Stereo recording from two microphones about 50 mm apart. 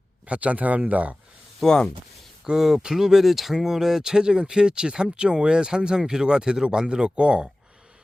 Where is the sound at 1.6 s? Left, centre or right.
Centre.